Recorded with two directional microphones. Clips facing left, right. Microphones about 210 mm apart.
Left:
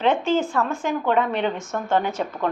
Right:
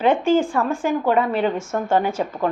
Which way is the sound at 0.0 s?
10° right (ahead or behind).